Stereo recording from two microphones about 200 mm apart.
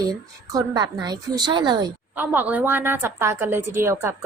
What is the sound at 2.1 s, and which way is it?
A woman's voice, 10° right (ahead or behind).